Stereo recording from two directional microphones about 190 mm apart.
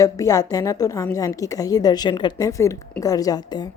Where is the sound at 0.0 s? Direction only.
15° left (ahead or behind).